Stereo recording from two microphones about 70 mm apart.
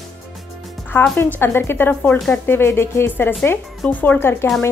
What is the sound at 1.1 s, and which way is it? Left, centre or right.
Speech, left.